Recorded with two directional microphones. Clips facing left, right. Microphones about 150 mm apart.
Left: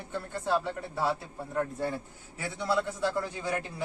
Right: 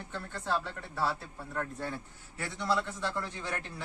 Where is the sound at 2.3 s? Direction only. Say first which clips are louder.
Left 2 dB; 10° left (ahead or behind).